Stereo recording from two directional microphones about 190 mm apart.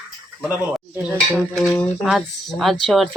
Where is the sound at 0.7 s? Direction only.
5° right (ahead or behind).